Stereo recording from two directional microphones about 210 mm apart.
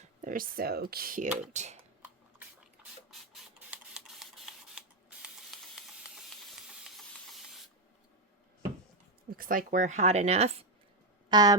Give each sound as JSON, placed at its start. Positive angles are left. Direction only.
{"t": 0.2, "sound": "speech", "side_deg": -40}
{"t": 3.1, "sound": "printer", "side_deg": 0}
{"t": 4.7, "sound": "spray", "side_deg": -5}
{"t": 9.3, "sound": "speech", "side_deg": -40}
{"t": 11.3, "sound": "speech", "side_deg": -20}